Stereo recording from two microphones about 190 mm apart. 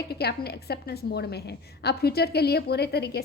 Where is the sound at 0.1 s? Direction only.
55° left (ahead or behind).